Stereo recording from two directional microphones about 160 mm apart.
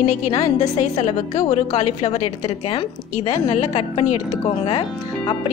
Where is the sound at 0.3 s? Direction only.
40° left (ahead or behind).